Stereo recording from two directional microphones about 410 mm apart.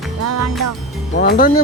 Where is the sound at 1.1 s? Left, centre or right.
Left.